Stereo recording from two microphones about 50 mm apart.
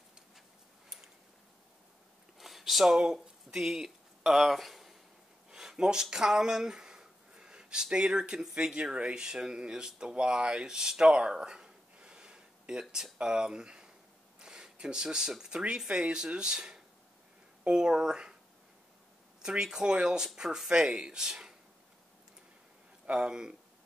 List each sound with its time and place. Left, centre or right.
2.3 s speech: centre
5.5 s speech: centre
19.4 s speech: centre
23.1 s speech: centre